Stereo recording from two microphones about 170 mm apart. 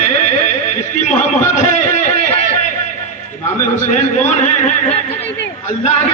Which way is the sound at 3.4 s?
45° left (ahead or behind).